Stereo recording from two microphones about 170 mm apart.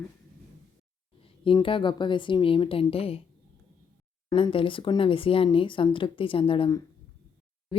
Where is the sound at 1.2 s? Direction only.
30° left (ahead or behind).